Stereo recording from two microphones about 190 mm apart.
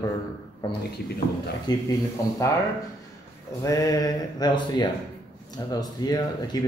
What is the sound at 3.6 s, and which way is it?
A man's voice, 15° left (ahead or behind).